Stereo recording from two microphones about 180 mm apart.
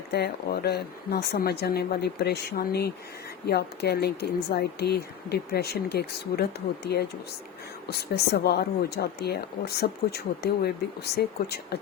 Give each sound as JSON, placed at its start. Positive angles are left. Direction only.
{"t": 0.1, "sound": "speech", "side_deg": 65}